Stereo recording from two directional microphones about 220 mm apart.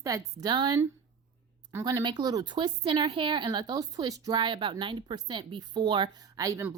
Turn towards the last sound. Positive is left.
turn(degrees=-15)  # may be behind; listen again after turning